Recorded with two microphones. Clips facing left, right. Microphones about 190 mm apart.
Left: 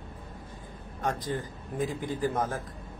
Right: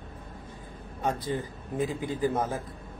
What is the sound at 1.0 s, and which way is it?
A man's voice, 10° right (ahead or behind).